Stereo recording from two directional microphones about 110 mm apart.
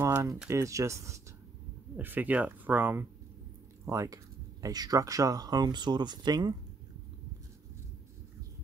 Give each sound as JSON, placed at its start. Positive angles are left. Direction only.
{"t": 0.0, "sound": "speech", "side_deg": -25}
{"t": 2.0, "sound": "speech", "side_deg": -15}
{"t": 3.8, "sound": "speech", "side_deg": -30}